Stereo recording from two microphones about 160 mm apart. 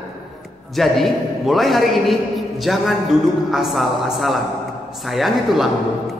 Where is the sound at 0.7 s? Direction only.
Centre (ahead or behind).